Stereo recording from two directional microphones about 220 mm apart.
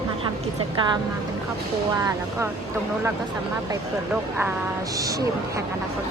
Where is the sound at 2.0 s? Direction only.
15° right (ahead or behind).